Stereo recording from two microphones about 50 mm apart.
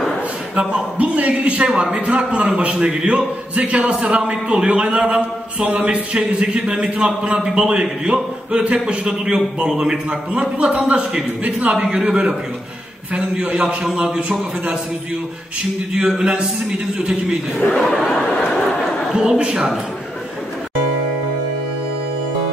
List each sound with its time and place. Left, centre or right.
0.6 s a man's voice: right
15.9 s a man's voice: centre
17.6 s speech: centre
18.4 s a sound: centre
19.1 s a man's voice: centre